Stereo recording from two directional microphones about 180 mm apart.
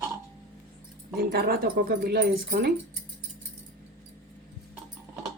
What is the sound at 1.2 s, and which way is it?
Speech, 60° right (ahead or behind).